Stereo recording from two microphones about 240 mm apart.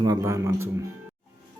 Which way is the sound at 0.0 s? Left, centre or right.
Centre.